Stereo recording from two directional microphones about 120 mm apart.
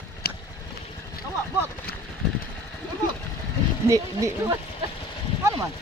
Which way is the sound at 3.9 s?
25° right (ahead or behind).